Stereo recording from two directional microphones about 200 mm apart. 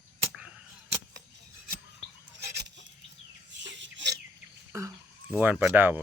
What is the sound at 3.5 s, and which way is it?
Chicken, 65° right (ahead or behind).